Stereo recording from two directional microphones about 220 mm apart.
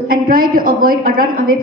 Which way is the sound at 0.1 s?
40° right (ahead or behind).